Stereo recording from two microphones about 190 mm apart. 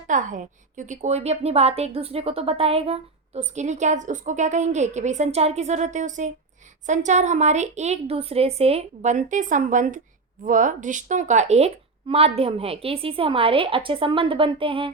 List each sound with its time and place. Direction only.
0.1 s a woman's voice: 40° right (ahead or behind)